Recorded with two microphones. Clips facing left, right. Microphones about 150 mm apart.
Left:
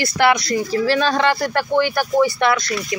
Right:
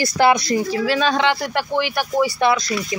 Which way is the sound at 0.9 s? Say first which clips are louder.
Even; centre (ahead or behind).